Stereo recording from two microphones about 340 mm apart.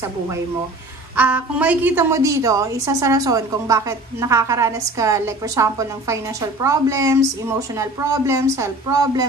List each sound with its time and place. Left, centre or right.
1.1 s a woman's voice: centre